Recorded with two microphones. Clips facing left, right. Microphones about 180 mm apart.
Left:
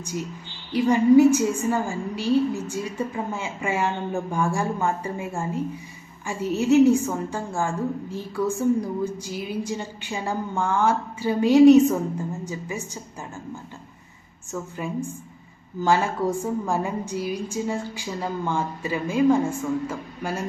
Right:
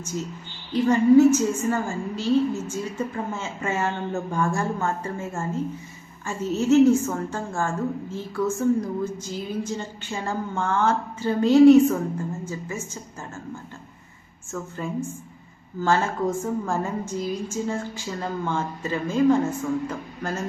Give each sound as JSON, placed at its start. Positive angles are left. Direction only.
{"t": 0.0, "sound": "a woman's voice", "side_deg": 15}
{"t": 14.8, "sound": "a woman's voice", "side_deg": 15}